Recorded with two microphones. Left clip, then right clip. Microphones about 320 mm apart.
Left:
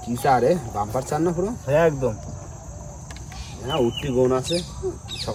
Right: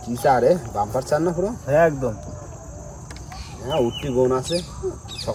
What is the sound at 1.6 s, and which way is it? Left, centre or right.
Speech, left.